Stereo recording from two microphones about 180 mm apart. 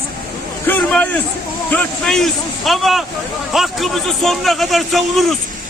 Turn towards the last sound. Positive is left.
turn(degrees=0)  # may be behind; listen again after turning